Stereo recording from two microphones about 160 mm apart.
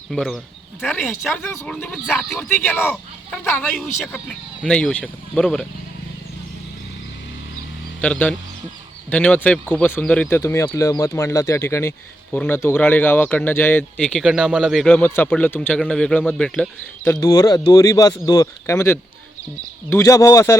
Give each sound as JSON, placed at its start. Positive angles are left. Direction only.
{"t": 0.1, "sound": "speech", "side_deg": 5}
{"t": 1.3, "sound": "speech", "side_deg": 10}
{"t": 2.5, "sound": "speech", "side_deg": 15}
{"t": 8.0, "sound": "speech", "side_deg": 10}